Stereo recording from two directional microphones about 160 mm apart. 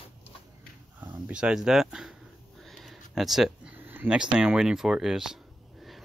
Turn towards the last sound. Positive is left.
turn(degrees=0)  # may be behind; listen again after turning